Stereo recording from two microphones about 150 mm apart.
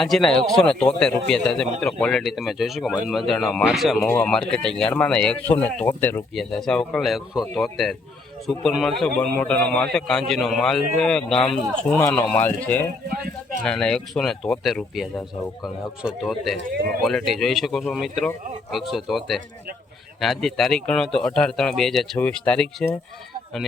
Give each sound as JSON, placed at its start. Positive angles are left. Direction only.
{"t": 0.0, "sound": "a man's voice", "side_deg": 0}
{"t": 4.0, "sound": "speech", "side_deg": 15}
{"t": 4.3, "sound": "a man's voice", "side_deg": 5}